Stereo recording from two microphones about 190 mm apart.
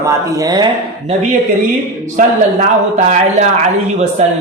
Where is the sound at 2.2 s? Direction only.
45° right (ahead or behind).